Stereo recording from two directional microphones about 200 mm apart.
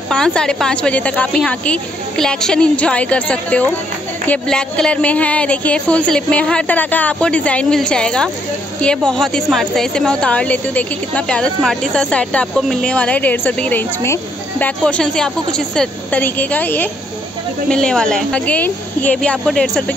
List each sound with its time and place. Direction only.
0.1 s a woman's voice: 5° left (ahead or behind)